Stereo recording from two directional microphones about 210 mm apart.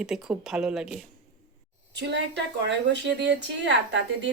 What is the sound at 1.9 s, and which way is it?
A woman's voice, 55° right (ahead or behind).